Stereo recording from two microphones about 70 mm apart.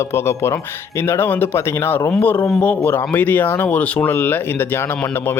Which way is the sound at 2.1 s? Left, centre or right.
Left.